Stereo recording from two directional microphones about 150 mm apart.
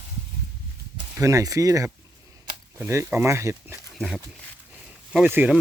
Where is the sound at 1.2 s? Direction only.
20° right (ahead or behind).